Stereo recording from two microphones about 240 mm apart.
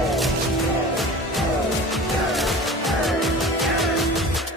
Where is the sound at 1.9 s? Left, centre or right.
Centre.